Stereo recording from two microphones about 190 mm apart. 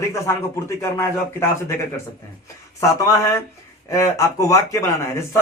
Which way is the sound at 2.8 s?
15° left (ahead or behind).